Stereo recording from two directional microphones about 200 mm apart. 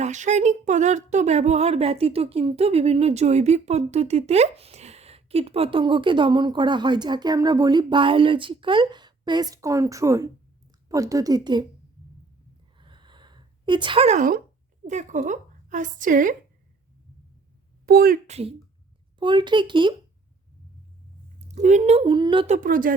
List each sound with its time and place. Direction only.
0.0 s a woman's voice: 35° right (ahead or behind); by 11.6 s 20° right (ahead or behind)
12.8 s a sound: 25° right (ahead or behind); by 14.4 s 40° right (ahead or behind)
14.8 s a woman's voice: 40° right (ahead or behind)
17.8 s a woman's voice: 45° right (ahead or behind)
18.3 s speech: 30° right (ahead or behind)
21.4 s speech: 35° right (ahead or behind)